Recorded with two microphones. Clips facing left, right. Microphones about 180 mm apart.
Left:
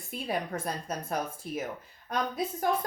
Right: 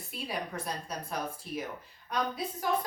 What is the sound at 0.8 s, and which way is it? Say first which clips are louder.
Speech: left 3 dB; 45° left (ahead or behind).